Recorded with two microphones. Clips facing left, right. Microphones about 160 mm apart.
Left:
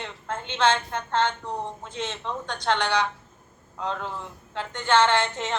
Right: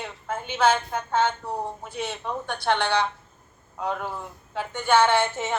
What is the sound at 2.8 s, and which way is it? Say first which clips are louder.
Speech: even; 15° left (ahead or behind).